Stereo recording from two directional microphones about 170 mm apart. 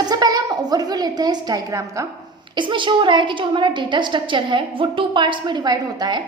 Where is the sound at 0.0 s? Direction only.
25° right (ahead or behind).